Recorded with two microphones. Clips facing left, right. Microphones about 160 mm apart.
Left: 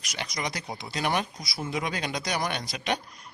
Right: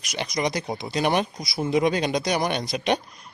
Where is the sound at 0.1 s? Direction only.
20° right (ahead or behind).